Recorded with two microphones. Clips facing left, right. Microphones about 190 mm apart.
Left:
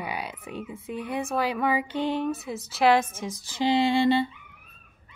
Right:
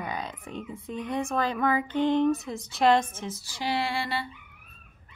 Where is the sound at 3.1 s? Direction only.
15° left (ahead or behind).